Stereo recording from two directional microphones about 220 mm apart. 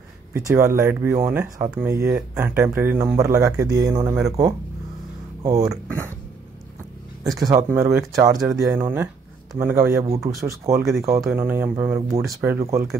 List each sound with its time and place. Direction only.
0.3 s speech: 15° right (ahead or behind)
7.4 s speech: 15° right (ahead or behind)